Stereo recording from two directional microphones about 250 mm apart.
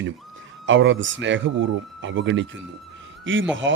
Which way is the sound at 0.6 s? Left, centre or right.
Right.